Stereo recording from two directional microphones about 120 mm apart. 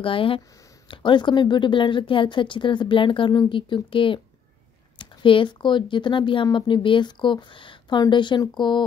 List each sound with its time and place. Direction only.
0.0 s speech: 45° left (ahead or behind)